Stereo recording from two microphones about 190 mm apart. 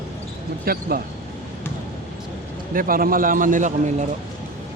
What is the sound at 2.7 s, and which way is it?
A man's voice, 50° right (ahead or behind).